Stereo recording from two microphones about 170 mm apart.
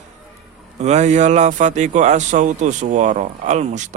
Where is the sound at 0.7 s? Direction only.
40° right (ahead or behind).